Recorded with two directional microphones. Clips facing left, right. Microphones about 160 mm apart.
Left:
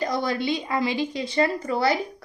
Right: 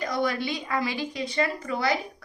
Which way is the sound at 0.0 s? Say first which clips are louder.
Left 2 dB; 30° left (ahead or behind).